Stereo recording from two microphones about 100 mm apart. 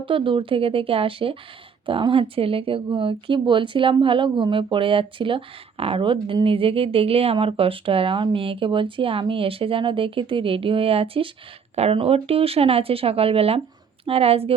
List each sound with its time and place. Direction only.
0.0 s speech: 55° right (ahead or behind)
11.7 s speech: 85° right